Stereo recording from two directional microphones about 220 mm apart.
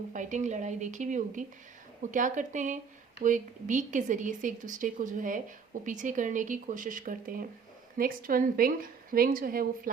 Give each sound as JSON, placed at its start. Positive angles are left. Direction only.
{"t": 0.1, "sound": "speech", "side_deg": -35}